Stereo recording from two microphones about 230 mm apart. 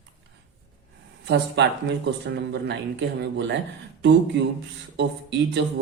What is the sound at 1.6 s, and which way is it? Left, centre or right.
Speech, right.